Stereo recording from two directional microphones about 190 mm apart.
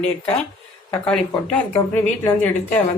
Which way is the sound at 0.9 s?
5° left (ahead or behind).